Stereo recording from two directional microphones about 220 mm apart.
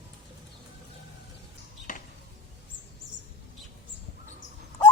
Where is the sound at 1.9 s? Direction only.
35° left (ahead or behind).